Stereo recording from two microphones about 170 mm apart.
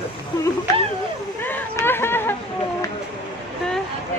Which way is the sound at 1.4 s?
10° left (ahead or behind).